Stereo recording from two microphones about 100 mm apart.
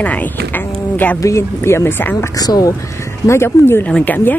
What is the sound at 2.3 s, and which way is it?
Speech, 40° left (ahead or behind).